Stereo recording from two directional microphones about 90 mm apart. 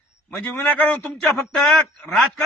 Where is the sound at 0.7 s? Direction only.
15° left (ahead or behind).